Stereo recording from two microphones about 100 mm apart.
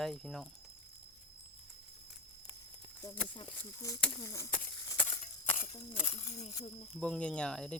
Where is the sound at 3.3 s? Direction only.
55° left (ahead or behind).